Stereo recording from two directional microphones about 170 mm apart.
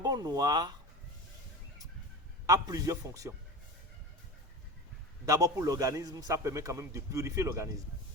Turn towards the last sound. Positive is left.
turn(degrees=-20)  # may be behind; listen again after turning